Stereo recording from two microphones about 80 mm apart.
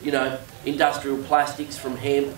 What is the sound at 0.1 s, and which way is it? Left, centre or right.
A man's voice, centre.